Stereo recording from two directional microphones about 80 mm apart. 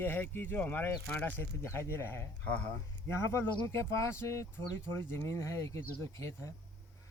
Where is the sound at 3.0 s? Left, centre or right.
Left.